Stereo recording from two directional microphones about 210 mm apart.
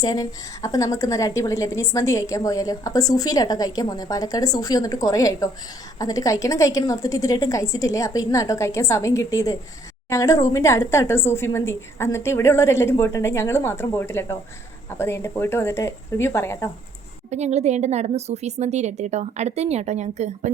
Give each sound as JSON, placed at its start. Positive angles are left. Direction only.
{"t": 0.0, "sound": "a woman's voice", "side_deg": 15}
{"t": 17.3, "sound": "a woman's voice", "side_deg": -30}